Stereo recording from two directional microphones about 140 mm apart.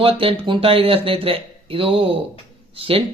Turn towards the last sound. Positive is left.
turn(degrees=-40)  # may be behind; listen again after turning